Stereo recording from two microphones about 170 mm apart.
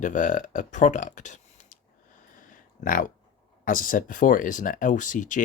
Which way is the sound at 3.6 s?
55° left (ahead or behind).